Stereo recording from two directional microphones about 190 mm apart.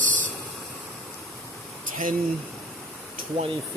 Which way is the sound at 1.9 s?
45° right (ahead or behind).